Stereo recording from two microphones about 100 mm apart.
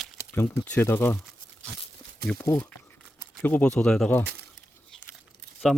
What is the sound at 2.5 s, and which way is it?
Speech, 20° left (ahead or behind).